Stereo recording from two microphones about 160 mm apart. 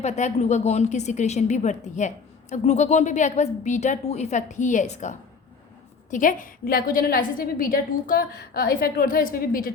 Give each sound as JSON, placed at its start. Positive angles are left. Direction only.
{"t": 0.0, "sound": "a woman's voice", "side_deg": 45}